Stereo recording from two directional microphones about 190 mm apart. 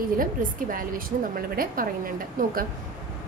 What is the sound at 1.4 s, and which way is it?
Speech, 50° right (ahead or behind).